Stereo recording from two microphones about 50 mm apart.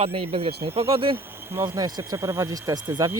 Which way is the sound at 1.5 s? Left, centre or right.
Right.